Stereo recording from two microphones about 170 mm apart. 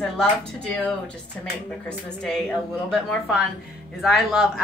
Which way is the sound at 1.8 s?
5° left (ahead or behind).